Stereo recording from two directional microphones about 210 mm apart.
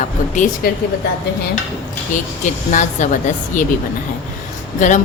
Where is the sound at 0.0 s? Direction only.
35° left (ahead or behind).